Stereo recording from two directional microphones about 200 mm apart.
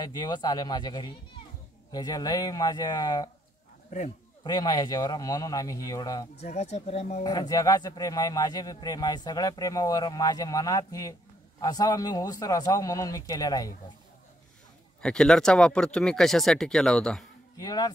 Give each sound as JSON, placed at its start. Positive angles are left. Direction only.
{"t": 0.0, "sound": "a man's voice", "side_deg": 20}
{"t": 4.4, "sound": "a man's voice", "side_deg": 20}
{"t": 6.3, "sound": "speech", "side_deg": 35}
{"t": 7.2, "sound": "a man's voice", "side_deg": 20}
{"t": 15.0, "sound": "speech", "side_deg": 5}
{"t": 17.6, "sound": "a man's voice", "side_deg": 20}